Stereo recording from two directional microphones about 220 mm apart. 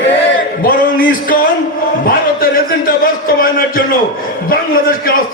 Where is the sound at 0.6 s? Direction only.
40° left (ahead or behind).